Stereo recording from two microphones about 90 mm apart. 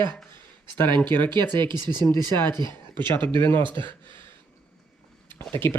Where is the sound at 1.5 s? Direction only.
55° right (ahead or behind).